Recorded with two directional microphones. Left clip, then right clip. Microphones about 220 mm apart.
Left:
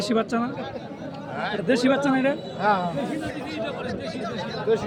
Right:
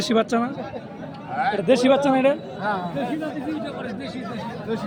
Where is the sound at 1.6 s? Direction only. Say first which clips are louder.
Right 3 dB; 30° right (ahead or behind).